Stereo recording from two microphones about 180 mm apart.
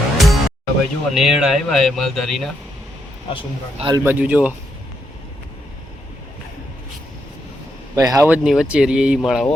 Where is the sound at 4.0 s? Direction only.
10° right (ahead or behind).